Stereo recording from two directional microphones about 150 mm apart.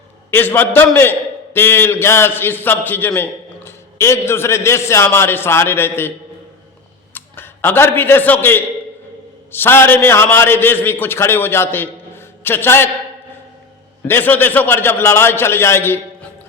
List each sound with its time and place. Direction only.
0.3 s a man's voice: 15° left (ahead or behind)
7.1 s a man's voice: 15° left (ahead or behind)
14.1 s a man's voice: 15° left (ahead or behind)